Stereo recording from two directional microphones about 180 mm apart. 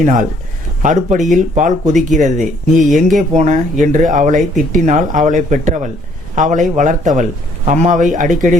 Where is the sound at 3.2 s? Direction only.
40° right (ahead or behind).